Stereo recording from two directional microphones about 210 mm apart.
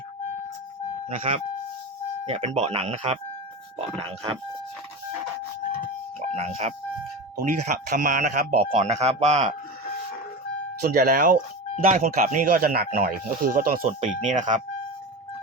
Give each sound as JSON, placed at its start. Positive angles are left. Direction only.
{"t": 1.0, "sound": "speech", "side_deg": -30}
{"t": 6.3, "sound": "speech", "side_deg": -30}
{"t": 10.8, "sound": "speech", "side_deg": -50}